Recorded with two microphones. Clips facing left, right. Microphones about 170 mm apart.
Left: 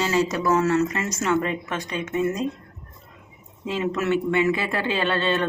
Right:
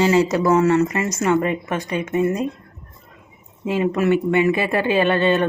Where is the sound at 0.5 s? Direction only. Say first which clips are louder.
Right 4 dB; 10° right (ahead or behind).